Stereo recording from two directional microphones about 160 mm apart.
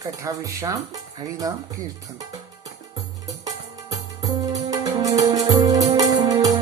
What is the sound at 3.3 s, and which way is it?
Music, 20° right (ahead or behind).